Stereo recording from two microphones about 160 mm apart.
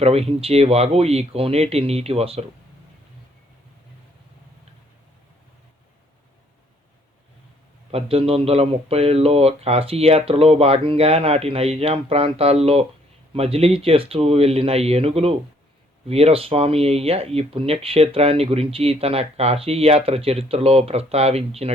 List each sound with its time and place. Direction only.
0.0 s speech: 40° right (ahead or behind)
7.9 s speech: 35° right (ahead or behind)